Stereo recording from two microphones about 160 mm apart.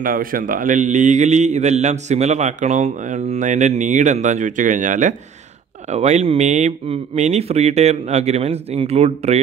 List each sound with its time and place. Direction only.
0.0 s a man's voice: 60° right (ahead or behind); by 9.4 s 40° right (ahead or behind)